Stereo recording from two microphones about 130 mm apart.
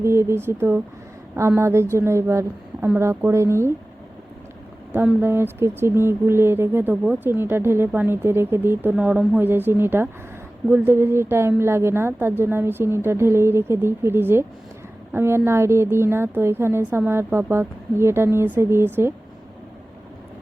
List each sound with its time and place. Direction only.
0.0 s a woman's voice: 20° right (ahead or behind)
5.2 s a woman's voice: 20° right (ahead or behind)